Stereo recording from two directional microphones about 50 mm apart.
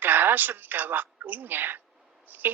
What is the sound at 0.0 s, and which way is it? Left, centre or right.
A woman's voice, right.